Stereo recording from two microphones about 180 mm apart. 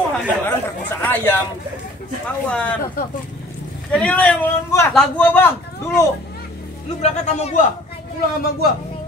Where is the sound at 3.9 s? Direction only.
5° left (ahead or behind).